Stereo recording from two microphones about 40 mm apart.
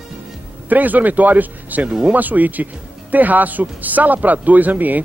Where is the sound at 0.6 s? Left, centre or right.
Right.